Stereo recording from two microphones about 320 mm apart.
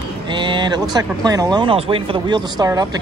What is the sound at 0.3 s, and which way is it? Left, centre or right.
Speech, centre.